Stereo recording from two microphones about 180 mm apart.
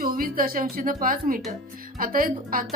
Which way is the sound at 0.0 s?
55° right (ahead or behind).